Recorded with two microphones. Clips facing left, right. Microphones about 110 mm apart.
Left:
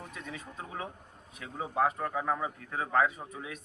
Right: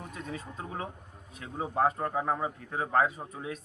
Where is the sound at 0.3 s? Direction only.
35° right (ahead or behind).